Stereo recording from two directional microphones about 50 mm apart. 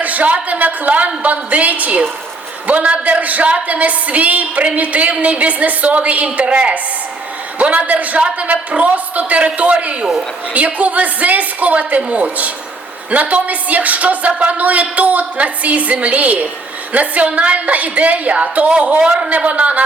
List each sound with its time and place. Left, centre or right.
0.0 s a woman's voice: right